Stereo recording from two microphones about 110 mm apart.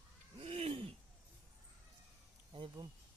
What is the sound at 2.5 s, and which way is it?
Speech, 50° right (ahead or behind).